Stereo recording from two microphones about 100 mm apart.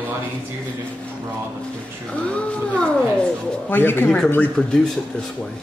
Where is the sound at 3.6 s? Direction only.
20° left (ahead or behind).